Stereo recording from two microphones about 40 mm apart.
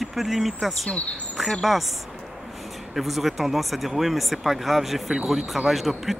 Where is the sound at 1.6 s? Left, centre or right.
Centre.